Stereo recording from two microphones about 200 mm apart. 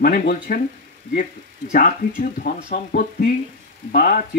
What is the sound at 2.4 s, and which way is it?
Speech, 45° left (ahead or behind).